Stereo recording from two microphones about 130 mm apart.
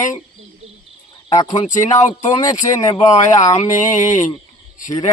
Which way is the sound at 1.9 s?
70° left (ahead or behind).